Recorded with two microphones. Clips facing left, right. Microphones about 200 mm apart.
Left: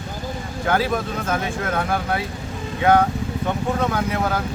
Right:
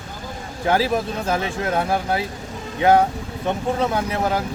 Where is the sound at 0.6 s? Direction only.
30° right (ahead or behind).